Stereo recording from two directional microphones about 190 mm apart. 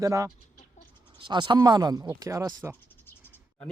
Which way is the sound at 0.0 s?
15° right (ahead or behind).